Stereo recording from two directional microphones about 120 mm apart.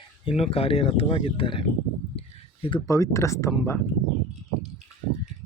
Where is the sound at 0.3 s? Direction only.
55° left (ahead or behind).